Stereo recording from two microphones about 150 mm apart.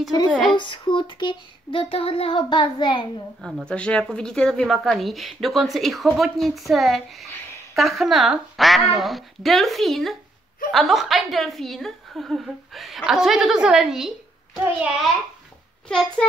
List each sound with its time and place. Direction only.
0.3 s a woman's voice: centre (ahead or behind)
0.6 s child singing: 35° left (ahead or behind)
3.3 s a woman's voice: centre (ahead or behind)
15.9 s a woman's voice: 5° left (ahead or behind)